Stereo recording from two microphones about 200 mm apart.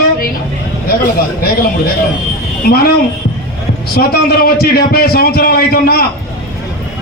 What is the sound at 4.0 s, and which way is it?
A man's voice, 50° left (ahead or behind).